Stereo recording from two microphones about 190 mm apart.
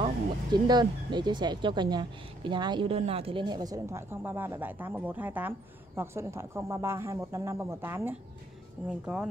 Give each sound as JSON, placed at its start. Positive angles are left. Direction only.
{"t": 0.0, "sound": "speech", "side_deg": -20}